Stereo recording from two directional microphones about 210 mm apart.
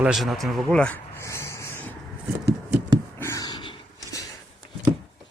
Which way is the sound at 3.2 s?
15° left (ahead or behind).